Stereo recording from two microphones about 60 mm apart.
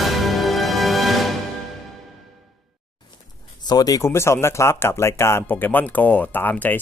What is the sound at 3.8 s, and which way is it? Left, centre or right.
Speech, left.